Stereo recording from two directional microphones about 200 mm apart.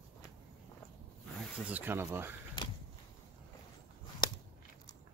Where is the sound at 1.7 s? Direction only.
10° right (ahead or behind).